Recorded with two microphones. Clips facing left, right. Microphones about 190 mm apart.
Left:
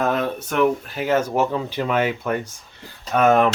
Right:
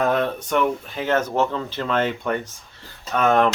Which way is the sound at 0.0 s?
Centre (ahead or behind).